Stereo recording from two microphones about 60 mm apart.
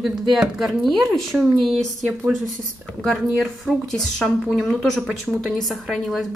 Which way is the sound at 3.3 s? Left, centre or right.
Centre.